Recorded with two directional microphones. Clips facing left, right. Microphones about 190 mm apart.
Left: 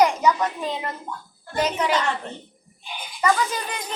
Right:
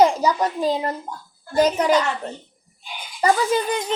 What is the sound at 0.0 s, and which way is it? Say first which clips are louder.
A woman's voice: right 2 dB; 30° right (ahead or behind).